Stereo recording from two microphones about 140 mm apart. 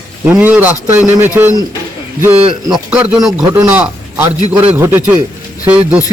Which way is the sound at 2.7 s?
5° right (ahead or behind).